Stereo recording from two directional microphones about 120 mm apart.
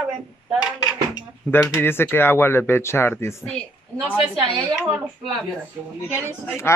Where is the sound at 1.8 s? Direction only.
20° left (ahead or behind).